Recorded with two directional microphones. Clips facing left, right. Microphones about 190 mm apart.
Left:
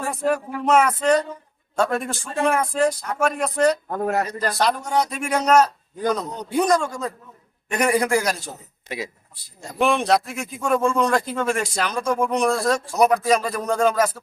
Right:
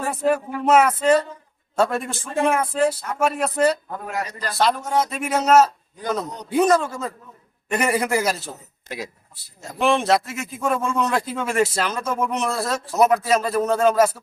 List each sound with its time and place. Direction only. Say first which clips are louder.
0.1 s a man's voice: right 2 dB; 5° right (ahead or behind)
3.9 s speech: left 6 dB; 50° left (ahead or behind)
4.5 s a man's voice: right 2 dB; centre (ahead or behind)